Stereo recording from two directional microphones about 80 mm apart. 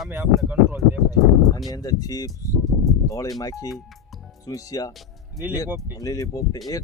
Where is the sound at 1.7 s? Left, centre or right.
Left.